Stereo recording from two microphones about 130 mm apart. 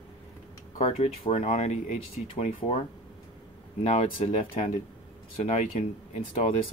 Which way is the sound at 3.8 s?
50° left (ahead or behind).